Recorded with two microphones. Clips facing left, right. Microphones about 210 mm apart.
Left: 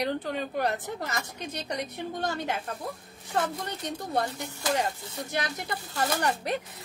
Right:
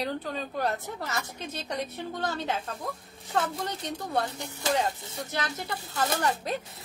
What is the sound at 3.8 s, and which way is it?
Speech, 15° left (ahead or behind).